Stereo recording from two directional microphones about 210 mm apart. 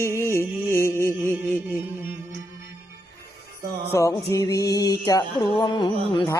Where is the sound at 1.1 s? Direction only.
10° right (ahead or behind).